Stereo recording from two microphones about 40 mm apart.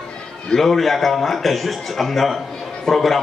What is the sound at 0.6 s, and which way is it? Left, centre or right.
A man's voice, centre.